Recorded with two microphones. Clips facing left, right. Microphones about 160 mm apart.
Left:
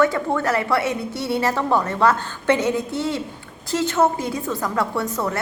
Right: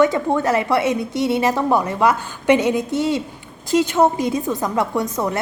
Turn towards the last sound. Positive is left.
turn(degrees=-15)  # may be behind; listen again after turning